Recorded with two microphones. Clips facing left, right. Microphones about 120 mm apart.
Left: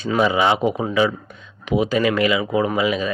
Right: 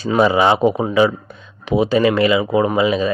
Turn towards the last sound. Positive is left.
turn(degrees=-30)  # may be behind; listen again after turning